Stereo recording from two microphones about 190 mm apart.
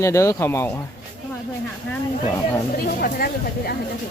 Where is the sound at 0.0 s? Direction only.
15° left (ahead or behind).